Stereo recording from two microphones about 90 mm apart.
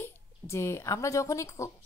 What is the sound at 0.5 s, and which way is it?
Speech, 30° left (ahead or behind).